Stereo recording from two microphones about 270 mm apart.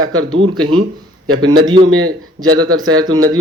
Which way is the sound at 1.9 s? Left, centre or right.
Right.